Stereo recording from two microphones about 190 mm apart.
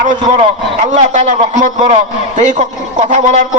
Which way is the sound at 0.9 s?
40° right (ahead or behind).